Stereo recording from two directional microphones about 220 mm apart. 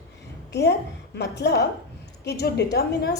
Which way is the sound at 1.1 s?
50° left (ahead or behind).